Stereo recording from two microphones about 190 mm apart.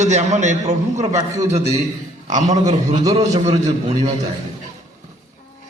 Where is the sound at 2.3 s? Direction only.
35° right (ahead or behind).